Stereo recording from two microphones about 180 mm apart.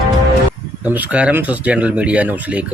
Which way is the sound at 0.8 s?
10° right (ahead or behind).